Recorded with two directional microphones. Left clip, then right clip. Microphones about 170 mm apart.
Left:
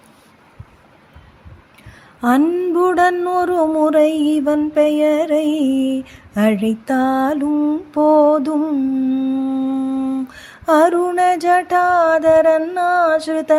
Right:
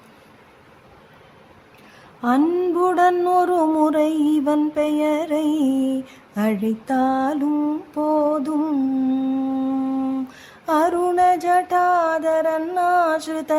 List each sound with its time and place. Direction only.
2.4 s mantra: centre (ahead or behind)
2.7 s music: 15° left (ahead or behind)
7.5 s mantra: centre (ahead or behind)
7.9 s mantra: 20° left (ahead or behind)
8.5 s humming: centre (ahead or behind)
10.7 s music: 20° left (ahead or behind)